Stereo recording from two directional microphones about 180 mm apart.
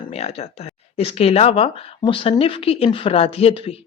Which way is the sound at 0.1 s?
35° left (ahead or behind).